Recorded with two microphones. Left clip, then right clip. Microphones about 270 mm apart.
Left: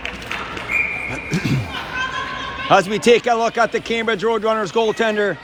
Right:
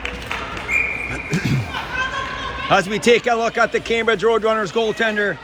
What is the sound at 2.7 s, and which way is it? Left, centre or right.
A man's voice, centre.